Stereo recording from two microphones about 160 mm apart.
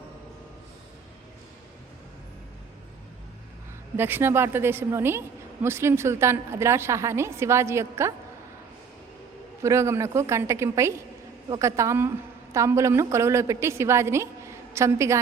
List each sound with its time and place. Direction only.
3.9 s a woman's voice: 15° right (ahead or behind)
9.6 s a woman's voice: 15° right (ahead or behind)